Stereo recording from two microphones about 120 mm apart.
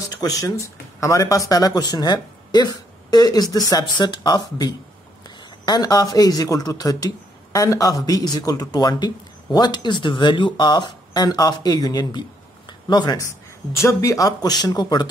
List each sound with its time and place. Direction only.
0.1 s a man's voice: 30° left (ahead or behind)